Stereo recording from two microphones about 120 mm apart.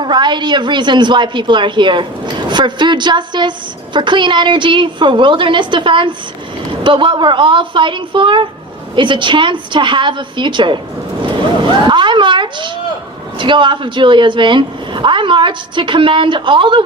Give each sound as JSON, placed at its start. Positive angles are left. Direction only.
{"t": 0.0, "sound": "a woman's voice", "side_deg": -40}
{"t": 11.6, "sound": "a sound", "side_deg": -40}
{"t": 13.4, "sound": "speech", "side_deg": -40}